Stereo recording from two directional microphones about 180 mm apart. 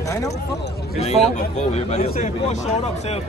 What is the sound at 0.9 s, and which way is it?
A man's voice, 40° left (ahead or behind).